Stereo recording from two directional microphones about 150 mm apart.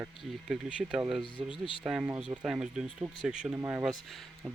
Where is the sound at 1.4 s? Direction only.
40° right (ahead or behind).